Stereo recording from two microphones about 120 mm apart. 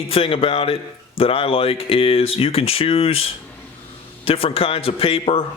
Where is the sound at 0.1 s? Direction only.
55° left (ahead or behind).